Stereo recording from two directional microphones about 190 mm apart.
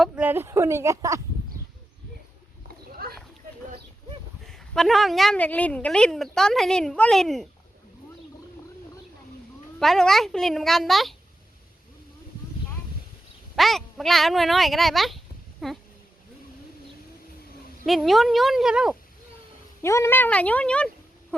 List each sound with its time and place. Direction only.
0.0 s speech: 10° right (ahead or behind)
3.0 s a sound: 55° right (ahead or behind)
4.4 s a woman's voice: centre (ahead or behind)
9.8 s a woman's voice: centre (ahead or behind)
13.6 s a woman's voice: centre (ahead or behind)
17.8 s a woman's voice: centre (ahead or behind)
19.8 s speech: 15° left (ahead or behind)